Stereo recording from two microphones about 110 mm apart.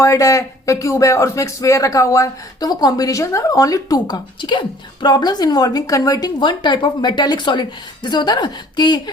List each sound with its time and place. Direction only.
0.0 s a woman's voice: 30° left (ahead or behind)